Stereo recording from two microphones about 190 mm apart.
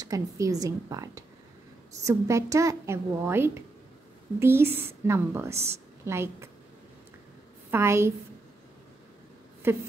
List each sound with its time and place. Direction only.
0.0 s a woman's voice: 20° right (ahead or behind)
7.7 s a woman's voice: 15° right (ahead or behind)
9.6 s a woman's voice: 15° right (ahead or behind)